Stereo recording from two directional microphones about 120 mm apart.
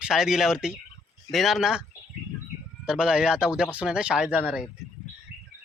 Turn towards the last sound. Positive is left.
turn(degrees=-10)  # may be behind; listen again after turning